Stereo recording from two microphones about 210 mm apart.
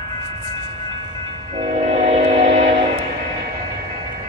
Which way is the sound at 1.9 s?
30° right (ahead or behind).